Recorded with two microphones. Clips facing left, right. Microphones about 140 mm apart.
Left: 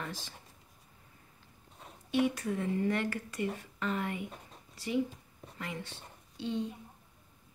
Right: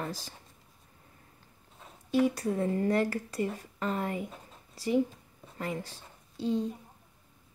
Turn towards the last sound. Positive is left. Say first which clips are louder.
# right 5 dB
turn(degrees=-40)  # may be behind; listen again after turning